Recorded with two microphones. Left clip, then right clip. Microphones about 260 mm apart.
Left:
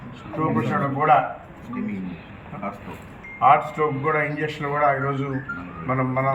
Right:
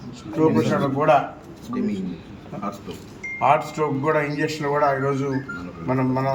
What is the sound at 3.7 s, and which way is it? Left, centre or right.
A man's voice, centre.